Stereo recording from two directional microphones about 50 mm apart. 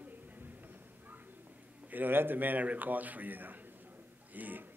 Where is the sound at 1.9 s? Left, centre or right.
Right.